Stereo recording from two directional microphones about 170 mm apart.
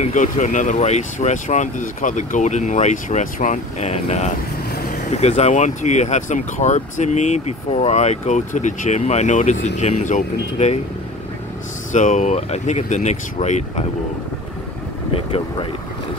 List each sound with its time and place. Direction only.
0.0 s speech: 45° left (ahead or behind)
11.9 s speech: 45° left (ahead or behind)